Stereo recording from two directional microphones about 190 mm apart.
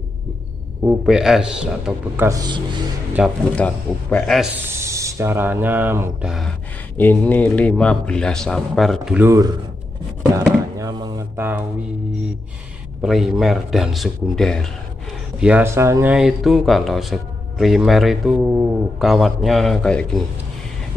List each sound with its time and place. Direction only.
0.8 s speech: 5° right (ahead or behind)
2.2 s speech: 20° right (ahead or behind)
3.2 s speech: 5° right (ahead or behind)
3.5 s speech: 5° left (ahead or behind)
4.6 s speech: 15° right (ahead or behind)
7.0 s speech: 10° left (ahead or behind)
10.3 s a sound: 20° right (ahead or behind)
13.0 s speech: centre (ahead or behind)
15.4 s speech: 10° right (ahead or behind)